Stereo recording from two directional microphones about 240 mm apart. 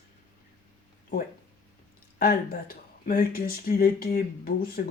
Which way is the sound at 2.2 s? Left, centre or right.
Left.